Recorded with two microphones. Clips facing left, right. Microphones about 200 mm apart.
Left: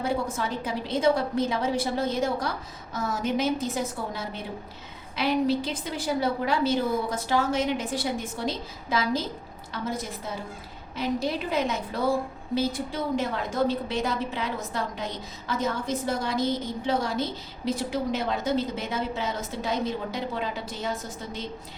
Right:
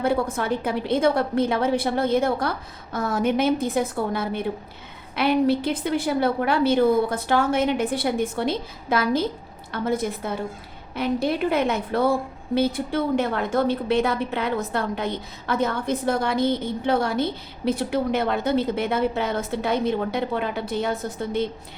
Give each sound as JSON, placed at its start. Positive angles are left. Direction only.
{"t": 0.0, "sound": "a woman's voice", "side_deg": -60}